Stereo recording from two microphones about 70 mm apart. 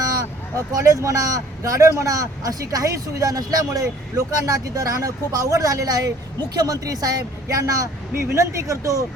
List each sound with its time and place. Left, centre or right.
0.5 s a man's voice: right